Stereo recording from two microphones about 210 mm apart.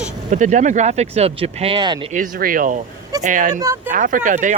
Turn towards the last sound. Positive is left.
turn(degrees=-35)  # may be behind; listen again after turning